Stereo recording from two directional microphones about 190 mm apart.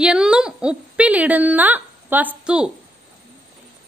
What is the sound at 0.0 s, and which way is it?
A woman's voice, 5° right (ahead or behind).